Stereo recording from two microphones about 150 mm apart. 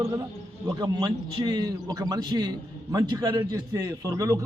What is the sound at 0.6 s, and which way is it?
A man's voice, 25° right (ahead or behind).